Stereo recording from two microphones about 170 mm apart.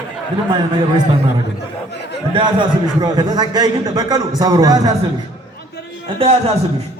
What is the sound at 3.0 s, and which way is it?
A man's voice, 25° right (ahead or behind).